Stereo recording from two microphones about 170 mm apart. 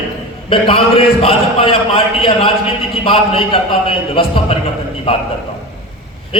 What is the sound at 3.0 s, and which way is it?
Speech, 30° left (ahead or behind).